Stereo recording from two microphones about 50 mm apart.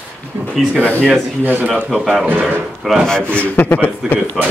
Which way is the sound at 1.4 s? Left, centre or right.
Right.